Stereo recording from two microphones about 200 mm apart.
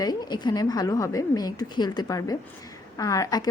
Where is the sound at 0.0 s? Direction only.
20° left (ahead or behind).